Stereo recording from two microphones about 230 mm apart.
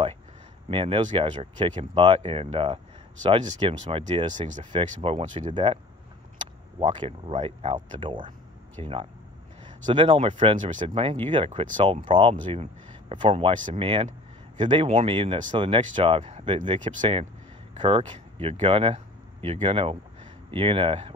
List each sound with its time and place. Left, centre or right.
0.7 s speech: right
6.8 s speech: centre